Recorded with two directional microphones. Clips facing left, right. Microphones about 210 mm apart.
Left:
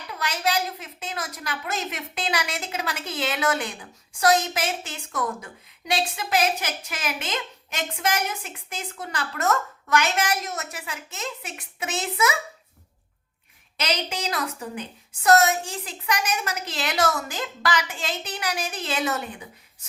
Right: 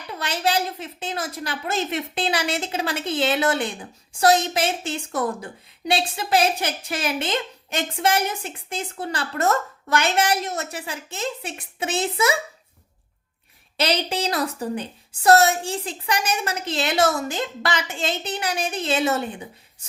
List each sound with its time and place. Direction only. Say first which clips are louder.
0.1 s a woman's voice: right 3 dB; 30° right (ahead or behind)
13.7 s a woman's voice: right 5 dB; 30° right (ahead or behind)